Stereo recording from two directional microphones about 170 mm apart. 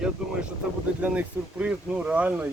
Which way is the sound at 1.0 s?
10° right (ahead or behind).